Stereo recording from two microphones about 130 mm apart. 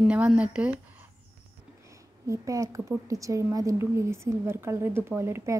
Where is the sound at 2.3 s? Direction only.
25° right (ahead or behind).